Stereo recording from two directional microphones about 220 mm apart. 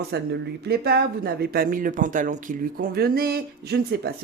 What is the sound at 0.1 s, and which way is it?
Speech, 50° right (ahead or behind).